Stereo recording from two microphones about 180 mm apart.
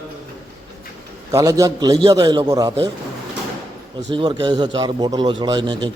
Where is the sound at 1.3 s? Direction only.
20° right (ahead or behind).